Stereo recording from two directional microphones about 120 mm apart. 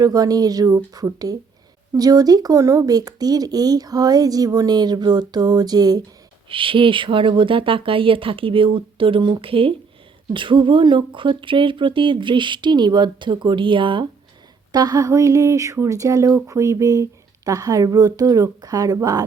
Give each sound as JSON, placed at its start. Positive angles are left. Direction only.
{"t": 0.0, "sound": "speech", "side_deg": -30}
{"t": 6.5, "sound": "speech", "side_deg": -45}
{"t": 14.7, "sound": "speech", "side_deg": -35}